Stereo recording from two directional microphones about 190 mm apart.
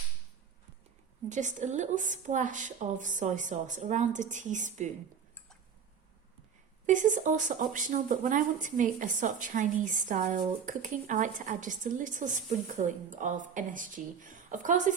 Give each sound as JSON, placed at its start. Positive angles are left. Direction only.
{"t": 1.3, "sound": "a woman's voice", "side_deg": -40}
{"t": 6.8, "sound": "speech", "side_deg": -40}